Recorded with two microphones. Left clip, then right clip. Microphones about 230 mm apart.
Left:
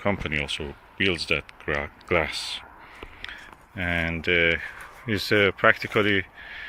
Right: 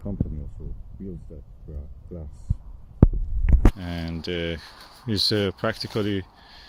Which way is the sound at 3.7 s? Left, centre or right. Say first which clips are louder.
Left 9 dB; centre.